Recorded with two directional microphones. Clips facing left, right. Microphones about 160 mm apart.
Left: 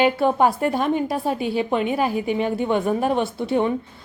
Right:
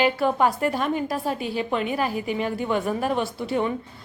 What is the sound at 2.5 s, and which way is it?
Speech, 25° left (ahead or behind).